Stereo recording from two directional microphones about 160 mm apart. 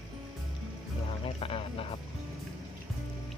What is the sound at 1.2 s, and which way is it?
Music, 35° left (ahead or behind).